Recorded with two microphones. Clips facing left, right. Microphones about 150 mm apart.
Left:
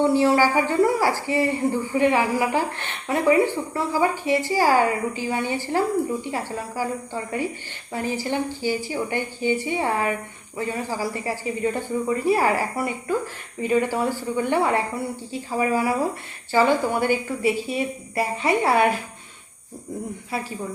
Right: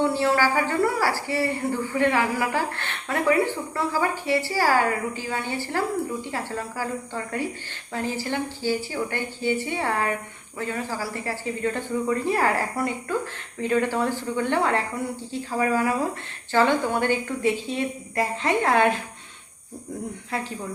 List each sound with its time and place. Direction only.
0.0 s a woman's voice: 15° left (ahead or behind)
20.3 s a woman's voice: 10° left (ahead or behind)